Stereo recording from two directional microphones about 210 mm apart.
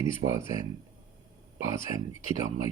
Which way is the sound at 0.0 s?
15° right (ahead or behind).